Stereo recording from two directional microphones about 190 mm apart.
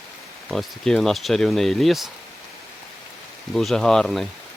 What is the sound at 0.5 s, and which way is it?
Speech, centre (ahead or behind).